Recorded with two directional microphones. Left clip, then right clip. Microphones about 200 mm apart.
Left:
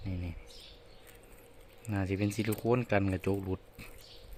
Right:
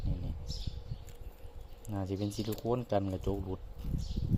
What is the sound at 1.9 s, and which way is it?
Speech, 15° left (ahead or behind).